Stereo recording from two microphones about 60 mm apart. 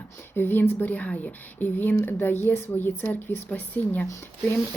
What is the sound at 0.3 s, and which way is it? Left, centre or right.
Speech, left.